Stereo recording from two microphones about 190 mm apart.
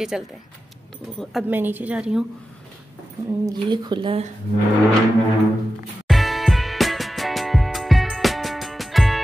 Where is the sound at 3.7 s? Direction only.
25° right (ahead or behind).